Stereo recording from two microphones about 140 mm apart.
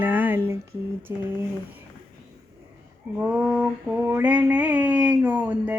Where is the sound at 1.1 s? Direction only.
20° right (ahead or behind).